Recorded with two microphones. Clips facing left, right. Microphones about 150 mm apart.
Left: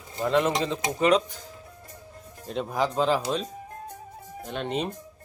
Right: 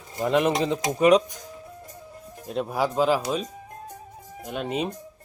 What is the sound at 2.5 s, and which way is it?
Speech, 5° right (ahead or behind).